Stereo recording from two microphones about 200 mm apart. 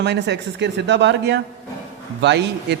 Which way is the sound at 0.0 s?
60° right (ahead or behind).